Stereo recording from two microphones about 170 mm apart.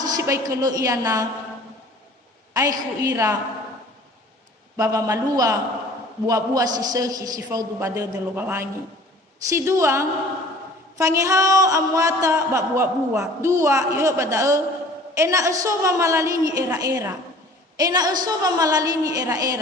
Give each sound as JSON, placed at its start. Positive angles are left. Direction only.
{"t": 0.0, "sound": "speech", "side_deg": -20}
{"t": 2.5, "sound": "speech", "side_deg": -20}
{"t": 4.8, "sound": "a woman's voice", "side_deg": -20}